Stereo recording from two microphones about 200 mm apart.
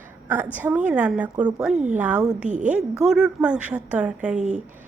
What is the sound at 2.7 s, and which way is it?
A woman's voice, 5° right (ahead or behind).